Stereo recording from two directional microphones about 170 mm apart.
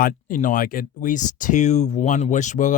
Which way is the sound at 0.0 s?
50° left (ahead or behind).